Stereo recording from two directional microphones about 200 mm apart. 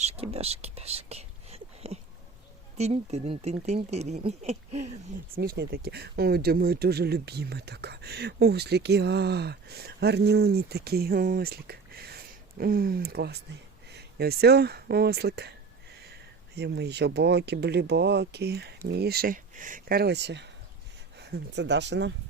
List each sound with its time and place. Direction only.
0.0 s whispering: 30° right (ahead or behind)
2.7 s speech: 35° right (ahead or behind)
5.4 s speech: 50° right (ahead or behind)
16.6 s speech: 55° right (ahead or behind)